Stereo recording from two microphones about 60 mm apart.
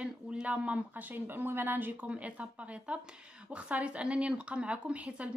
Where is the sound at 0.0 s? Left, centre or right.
Centre.